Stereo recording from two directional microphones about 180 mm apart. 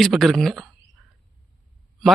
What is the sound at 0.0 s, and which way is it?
Speech, centre (ahead or behind).